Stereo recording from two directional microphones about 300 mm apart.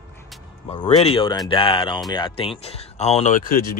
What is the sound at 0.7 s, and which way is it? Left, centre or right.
Speech, left.